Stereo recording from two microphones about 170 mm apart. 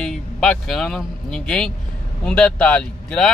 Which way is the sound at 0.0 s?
5° left (ahead or behind).